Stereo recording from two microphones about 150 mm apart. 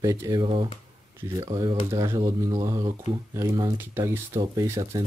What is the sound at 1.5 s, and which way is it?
Speech, 30° right (ahead or behind).